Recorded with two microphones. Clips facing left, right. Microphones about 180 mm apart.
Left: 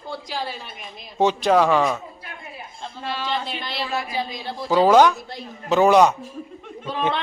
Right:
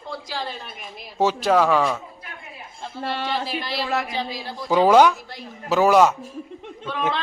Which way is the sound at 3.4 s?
5° right (ahead or behind).